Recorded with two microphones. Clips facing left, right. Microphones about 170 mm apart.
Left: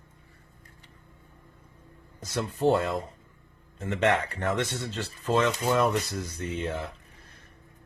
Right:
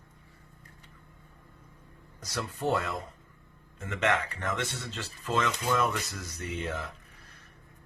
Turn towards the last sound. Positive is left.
turn(degrees=30)  # may be behind; listen again after turning